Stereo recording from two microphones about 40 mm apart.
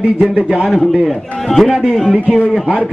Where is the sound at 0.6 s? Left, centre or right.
Centre.